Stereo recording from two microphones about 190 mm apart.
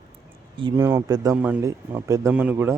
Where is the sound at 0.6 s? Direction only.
20° right (ahead or behind).